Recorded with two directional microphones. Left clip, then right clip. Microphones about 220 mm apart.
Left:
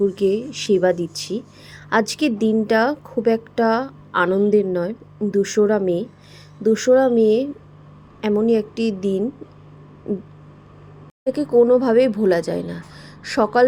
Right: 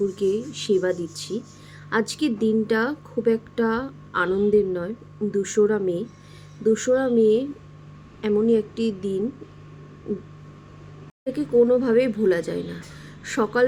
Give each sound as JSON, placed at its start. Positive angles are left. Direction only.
{"t": 0.2, "sound": "a woman's voice", "side_deg": 20}
{"t": 11.3, "sound": "a woman's voice", "side_deg": 20}